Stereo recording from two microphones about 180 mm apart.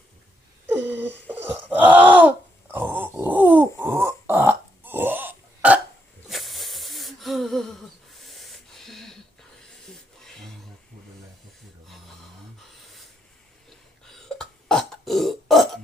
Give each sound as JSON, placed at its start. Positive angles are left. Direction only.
{"t": 0.7, "sound": "groan", "side_deg": -10}
{"t": 6.2, "sound": "a sound", "side_deg": 0}
{"t": 14.3, "sound": "burping", "side_deg": 0}